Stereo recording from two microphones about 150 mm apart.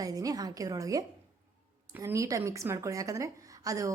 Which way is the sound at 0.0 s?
25° right (ahead or behind).